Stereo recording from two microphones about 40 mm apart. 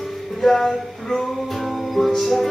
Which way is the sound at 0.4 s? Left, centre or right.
Centre.